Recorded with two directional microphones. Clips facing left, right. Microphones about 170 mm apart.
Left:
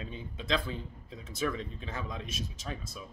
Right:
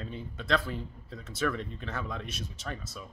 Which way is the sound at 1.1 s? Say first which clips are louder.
Right 2 dB; 10° left (ahead or behind).